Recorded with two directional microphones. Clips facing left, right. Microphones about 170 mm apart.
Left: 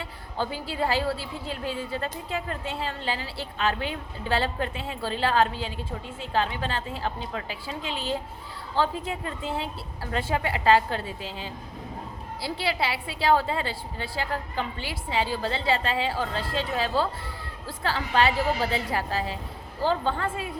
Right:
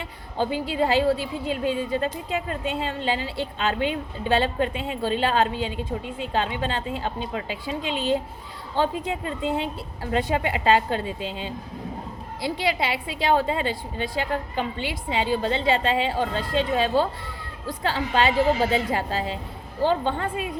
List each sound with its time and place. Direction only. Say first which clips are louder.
0.3 s a woman's voice: right 5 dB; 20° right (ahead or behind)